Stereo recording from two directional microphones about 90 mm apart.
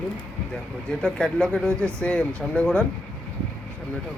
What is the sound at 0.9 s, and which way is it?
Speech, 10° left (ahead or behind).